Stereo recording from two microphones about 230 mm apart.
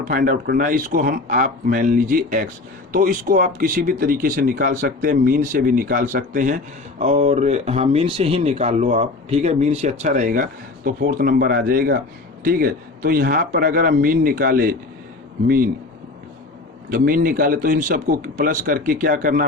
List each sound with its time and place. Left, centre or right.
0.1 s a man's voice: right
16.9 s a man's voice: right